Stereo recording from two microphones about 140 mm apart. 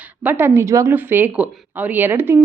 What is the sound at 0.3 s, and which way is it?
Speech, 15° right (ahead or behind).